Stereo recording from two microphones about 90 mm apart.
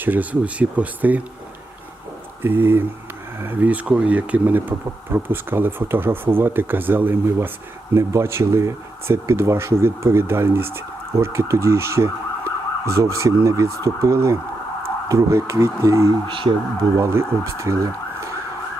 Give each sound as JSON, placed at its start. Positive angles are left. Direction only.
{"t": 0.0, "sound": "speech", "side_deg": -20}
{"t": 2.4, "sound": "speech", "side_deg": -25}
{"t": 16.2, "sound": "speech", "side_deg": -70}
{"t": 17.0, "sound": "speech", "side_deg": -30}